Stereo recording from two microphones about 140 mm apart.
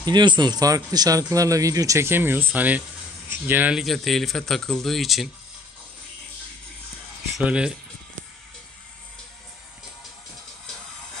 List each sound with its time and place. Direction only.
0.0 s speech: 30° right (ahead or behind); by 5.3 s centre (ahead or behind)
7.3 s speech: 5° right (ahead or behind)